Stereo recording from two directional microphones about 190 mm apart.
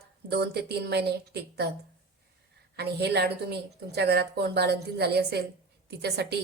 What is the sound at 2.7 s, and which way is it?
Speech, 60° right (ahead or behind).